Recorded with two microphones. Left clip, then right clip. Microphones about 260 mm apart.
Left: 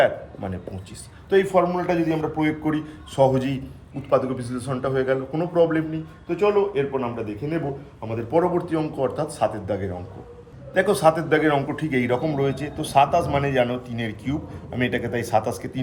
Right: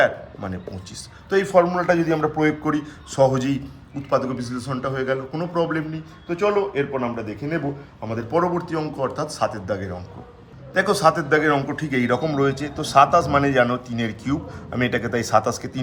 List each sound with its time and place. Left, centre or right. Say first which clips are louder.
0.0 s a man's voice: right 1 dB; centre